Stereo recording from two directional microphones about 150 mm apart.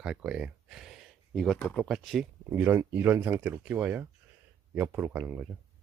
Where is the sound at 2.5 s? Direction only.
10° right (ahead or behind).